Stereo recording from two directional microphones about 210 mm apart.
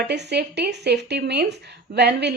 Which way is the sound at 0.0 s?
50° right (ahead or behind).